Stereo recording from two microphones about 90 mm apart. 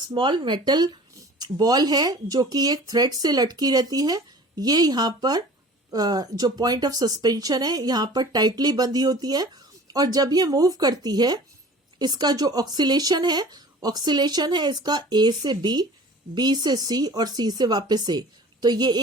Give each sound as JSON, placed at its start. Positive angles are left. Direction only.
{"t": 0.1, "sound": "speech", "side_deg": -60}